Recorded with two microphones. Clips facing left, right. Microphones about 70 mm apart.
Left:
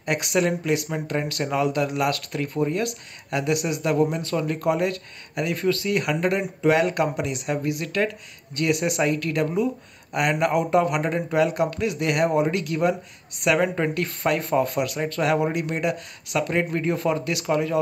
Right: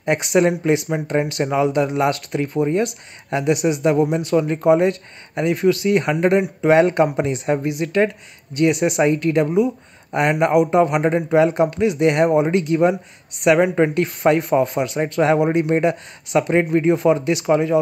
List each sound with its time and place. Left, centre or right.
0.0 s speech: right
13.6 s speech: centre
13.9 s speech: right